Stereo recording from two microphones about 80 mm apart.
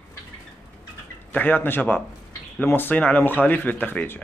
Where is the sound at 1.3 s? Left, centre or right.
Left.